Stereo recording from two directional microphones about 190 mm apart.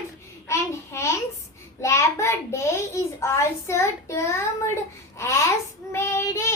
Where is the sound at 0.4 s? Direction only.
15° left (ahead or behind).